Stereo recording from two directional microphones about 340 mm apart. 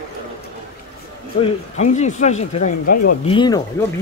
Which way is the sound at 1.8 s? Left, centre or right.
Left.